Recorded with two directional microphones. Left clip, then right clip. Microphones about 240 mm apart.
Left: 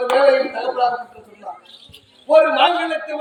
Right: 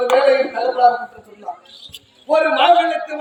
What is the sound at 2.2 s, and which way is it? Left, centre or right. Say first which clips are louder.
Speech: even; centre.